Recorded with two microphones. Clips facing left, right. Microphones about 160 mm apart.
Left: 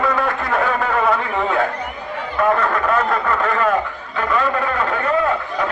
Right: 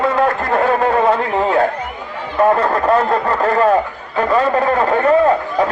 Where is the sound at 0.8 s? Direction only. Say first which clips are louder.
Right 4 dB; 30° right (ahead or behind).